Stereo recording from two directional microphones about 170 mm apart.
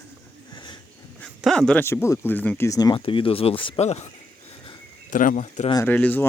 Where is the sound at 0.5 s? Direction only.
25° left (ahead or behind).